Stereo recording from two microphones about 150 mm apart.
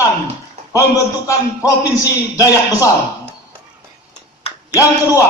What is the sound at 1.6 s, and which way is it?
A man's voice, 20° left (ahead or behind).